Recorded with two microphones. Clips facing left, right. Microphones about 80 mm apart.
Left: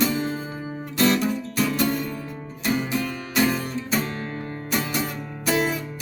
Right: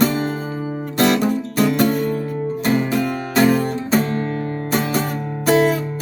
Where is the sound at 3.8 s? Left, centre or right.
Right.